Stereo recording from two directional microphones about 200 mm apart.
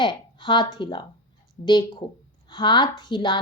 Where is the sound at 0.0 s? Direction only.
25° left (ahead or behind).